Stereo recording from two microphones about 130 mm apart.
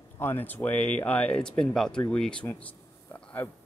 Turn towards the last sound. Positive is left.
turn(degrees=15)  # may be behind; listen again after turning